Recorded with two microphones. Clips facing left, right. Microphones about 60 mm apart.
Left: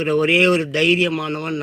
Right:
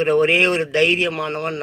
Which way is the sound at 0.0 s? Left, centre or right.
Right.